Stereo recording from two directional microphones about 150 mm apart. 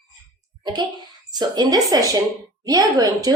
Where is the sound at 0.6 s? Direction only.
30° right (ahead or behind).